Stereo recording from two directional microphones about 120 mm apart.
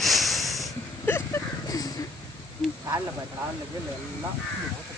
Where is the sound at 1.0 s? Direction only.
20° left (ahead or behind).